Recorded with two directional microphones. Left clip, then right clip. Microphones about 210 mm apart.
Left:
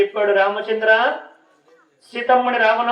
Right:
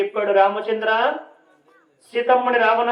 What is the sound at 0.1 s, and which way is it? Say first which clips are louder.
Speech: even; 50° right (ahead or behind).